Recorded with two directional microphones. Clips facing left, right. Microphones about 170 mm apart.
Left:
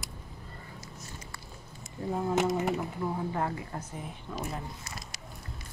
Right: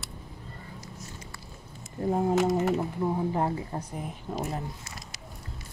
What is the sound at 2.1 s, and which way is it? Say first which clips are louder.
Speech: right 5 dB; 40° right (ahead or behind).